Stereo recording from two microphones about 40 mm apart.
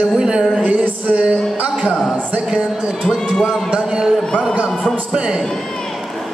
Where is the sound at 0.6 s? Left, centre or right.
Right.